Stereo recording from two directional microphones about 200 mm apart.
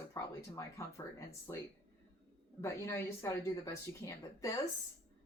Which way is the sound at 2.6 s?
15° left (ahead or behind).